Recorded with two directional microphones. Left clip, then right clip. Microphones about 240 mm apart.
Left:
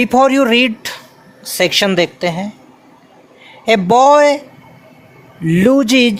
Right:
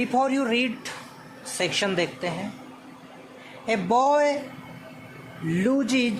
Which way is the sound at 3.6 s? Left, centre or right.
Left.